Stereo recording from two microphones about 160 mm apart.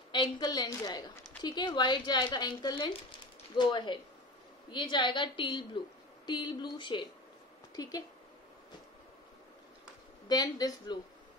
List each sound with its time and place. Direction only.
0.1 s a woman's voice: 25° left (ahead or behind)
10.2 s speech: 25° left (ahead or behind)